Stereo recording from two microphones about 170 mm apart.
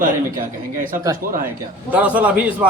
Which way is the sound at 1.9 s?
10° right (ahead or behind).